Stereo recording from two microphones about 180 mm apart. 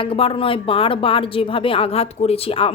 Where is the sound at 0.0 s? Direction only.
30° left (ahead or behind).